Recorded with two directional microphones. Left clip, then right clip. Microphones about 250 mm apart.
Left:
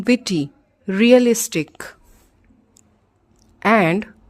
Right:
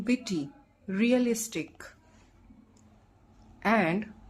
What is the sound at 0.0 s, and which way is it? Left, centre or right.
Speech, left.